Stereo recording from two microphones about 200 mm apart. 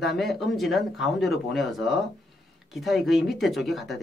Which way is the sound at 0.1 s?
Centre (ahead or behind).